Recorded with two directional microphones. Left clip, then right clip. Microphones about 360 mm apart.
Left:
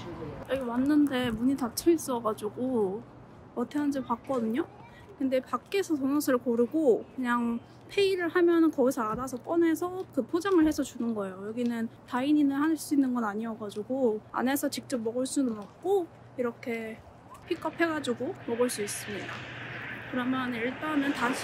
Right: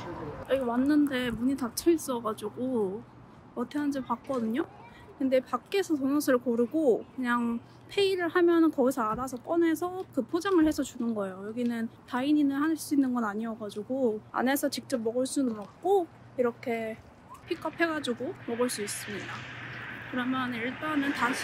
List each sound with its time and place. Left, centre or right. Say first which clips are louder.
0.0 s speech: right 2 dB; centre
18.2 s speech: left 2 dB; centre